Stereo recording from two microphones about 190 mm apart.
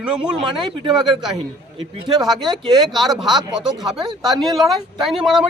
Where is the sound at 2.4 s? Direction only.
25° right (ahead or behind).